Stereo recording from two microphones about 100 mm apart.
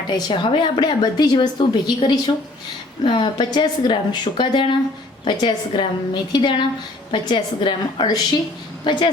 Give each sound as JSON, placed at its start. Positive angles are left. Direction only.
{"t": 0.1, "sound": "a woman's voice", "side_deg": 50}